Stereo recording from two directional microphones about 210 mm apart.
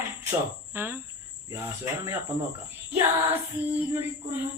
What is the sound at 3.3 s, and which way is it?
Speech, 10° right (ahead or behind).